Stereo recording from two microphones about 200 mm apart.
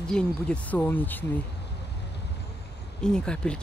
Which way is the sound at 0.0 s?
5° left (ahead or behind).